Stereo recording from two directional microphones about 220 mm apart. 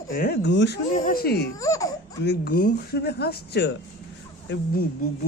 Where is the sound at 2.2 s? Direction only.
45° left (ahead or behind).